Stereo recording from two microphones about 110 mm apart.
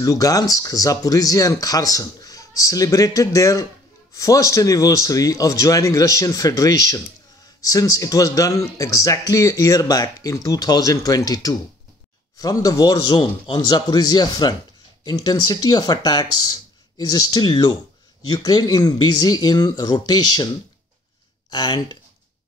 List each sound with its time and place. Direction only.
0.0 s speech: 35° left (ahead or behind)
21.5 s speech: 40° left (ahead or behind)